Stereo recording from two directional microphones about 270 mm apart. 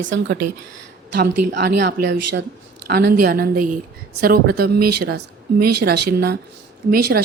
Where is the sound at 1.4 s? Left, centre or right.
Right.